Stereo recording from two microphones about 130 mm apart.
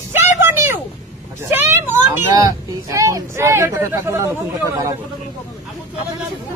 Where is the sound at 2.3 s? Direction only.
25° right (ahead or behind).